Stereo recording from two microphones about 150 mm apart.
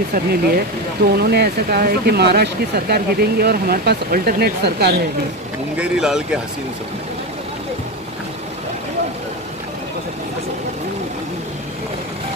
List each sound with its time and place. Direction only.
0.1 s speech: 85° right
5.8 s speech: 5° right (ahead or behind)